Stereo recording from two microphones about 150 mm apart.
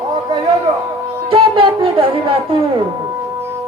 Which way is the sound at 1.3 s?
35° right (ahead or behind).